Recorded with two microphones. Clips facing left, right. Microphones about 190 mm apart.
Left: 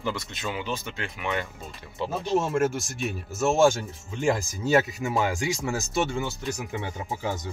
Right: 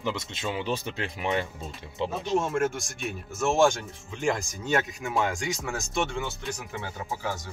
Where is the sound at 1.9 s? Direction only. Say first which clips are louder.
Left 1 dB; 20° right (ahead or behind).